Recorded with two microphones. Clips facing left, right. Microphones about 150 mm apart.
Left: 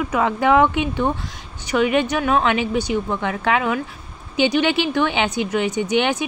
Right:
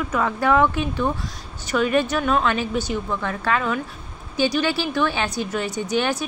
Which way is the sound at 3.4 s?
15° left (ahead or behind).